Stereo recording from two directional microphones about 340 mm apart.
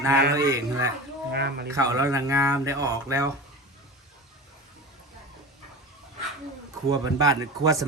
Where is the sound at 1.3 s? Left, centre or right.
Right.